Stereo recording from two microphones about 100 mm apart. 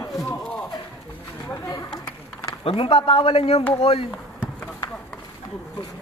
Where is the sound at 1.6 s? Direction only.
30° left (ahead or behind).